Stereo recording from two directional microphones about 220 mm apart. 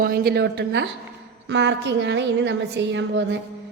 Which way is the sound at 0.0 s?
40° right (ahead or behind).